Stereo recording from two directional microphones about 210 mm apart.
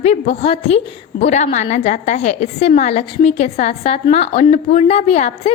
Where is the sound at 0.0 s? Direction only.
30° left (ahead or behind).